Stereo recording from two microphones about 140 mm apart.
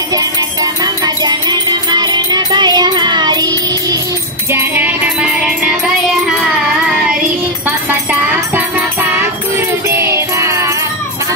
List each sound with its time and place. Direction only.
0.1 s music: 25° right (ahead or behind)
4.5 s music: 15° right (ahead or behind)
8.1 s music: 10° right (ahead or behind)